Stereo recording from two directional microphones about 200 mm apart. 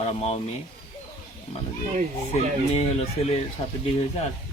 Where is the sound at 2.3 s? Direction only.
30° left (ahead or behind).